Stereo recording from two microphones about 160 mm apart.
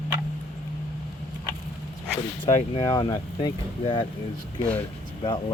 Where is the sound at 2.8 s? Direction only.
25° left (ahead or behind).